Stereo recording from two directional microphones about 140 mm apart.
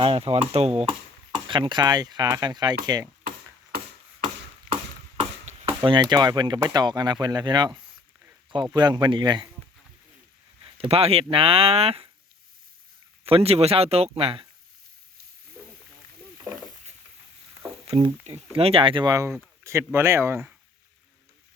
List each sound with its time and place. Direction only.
0.0 s speech: 40° right (ahead or behind)
1.3 s speech: 35° right (ahead or behind)
4.7 s chop: 5° right (ahead or behind)
5.5 s chop: 55° right (ahead or behind)
5.8 s speech: 35° right (ahead or behind)
10.6 s speech: 40° right (ahead or behind)
13.2 s speech: 45° right (ahead or behind)
17.8 s speech: 40° right (ahead or behind)
19.1 s speech: 20° right (ahead or behind)